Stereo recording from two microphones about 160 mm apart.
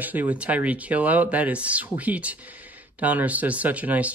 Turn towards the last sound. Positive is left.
turn(degrees=-10)  # may be behind; listen again after turning